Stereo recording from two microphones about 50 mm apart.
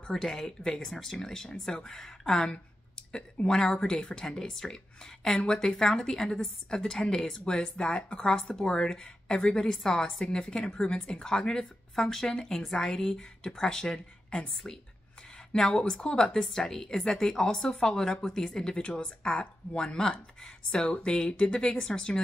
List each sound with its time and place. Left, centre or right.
0.1 s a woman's voice: centre
7.5 s a woman's voice: left
15.5 s a woman's voice: centre